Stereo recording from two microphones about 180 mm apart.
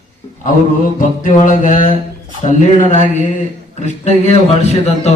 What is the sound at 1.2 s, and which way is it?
Music, 45° left (ahead or behind).